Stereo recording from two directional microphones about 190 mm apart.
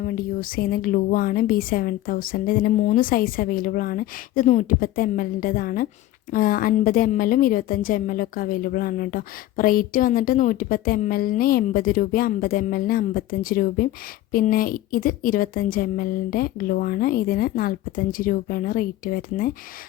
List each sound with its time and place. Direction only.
0.0 s a woman's voice: 50° left (ahead or behind)